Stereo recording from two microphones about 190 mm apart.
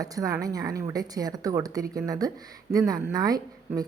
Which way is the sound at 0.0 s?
20° right (ahead or behind).